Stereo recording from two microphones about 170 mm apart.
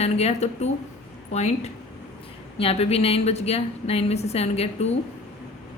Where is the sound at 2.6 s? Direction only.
35° left (ahead or behind).